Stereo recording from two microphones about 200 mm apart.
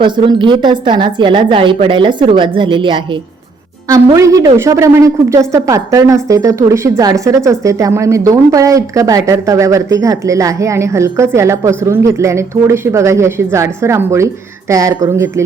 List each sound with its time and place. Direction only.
0.0 s a woman's voice: 25° right (ahead or behind)